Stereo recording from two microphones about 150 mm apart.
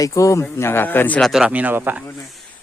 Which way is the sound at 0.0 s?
20° left (ahead or behind).